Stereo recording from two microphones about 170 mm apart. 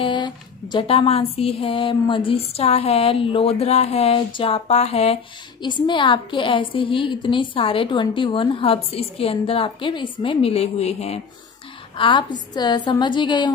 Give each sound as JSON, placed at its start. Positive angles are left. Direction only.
{"t": 0.0, "sound": "a woman's voice", "side_deg": 25}
{"t": 12.0, "sound": "a woman's voice", "side_deg": 30}